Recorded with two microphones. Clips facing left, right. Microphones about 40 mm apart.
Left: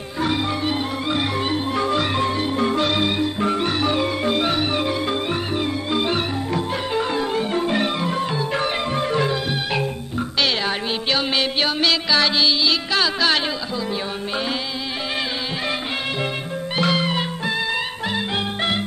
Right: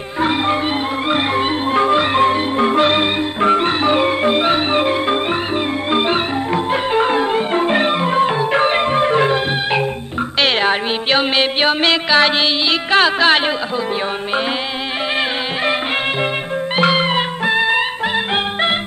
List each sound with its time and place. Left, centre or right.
0.2 s music: right
16.7 s music: right